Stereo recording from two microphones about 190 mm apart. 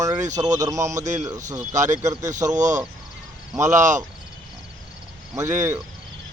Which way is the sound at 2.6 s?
40° right (ahead or behind).